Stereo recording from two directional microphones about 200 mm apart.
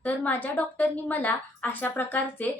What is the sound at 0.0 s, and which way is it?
A woman's voice, 10° left (ahead or behind).